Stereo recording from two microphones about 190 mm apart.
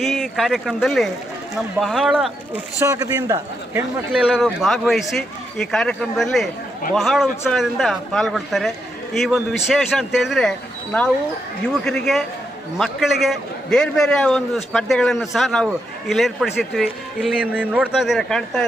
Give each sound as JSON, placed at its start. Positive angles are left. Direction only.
{"t": 0.0, "sound": "a man's voice", "side_deg": 0}
{"t": 2.8, "sound": "a man's voice", "side_deg": -15}
{"t": 4.2, "sound": "a man's voice", "side_deg": -5}
{"t": 11.9, "sound": "a man's voice", "side_deg": 0}